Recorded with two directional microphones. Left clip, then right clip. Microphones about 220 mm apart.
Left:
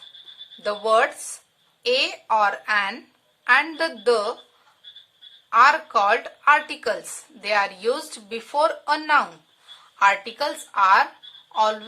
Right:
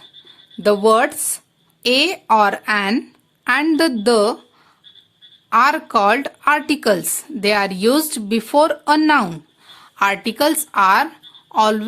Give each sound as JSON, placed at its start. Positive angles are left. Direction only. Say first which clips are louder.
{"t": 0.6, "sound": "speech", "louder": "right 6 dB", "side_deg": -45}
{"t": 5.5, "sound": "speech", "louder": "right 2 dB", "side_deg": -45}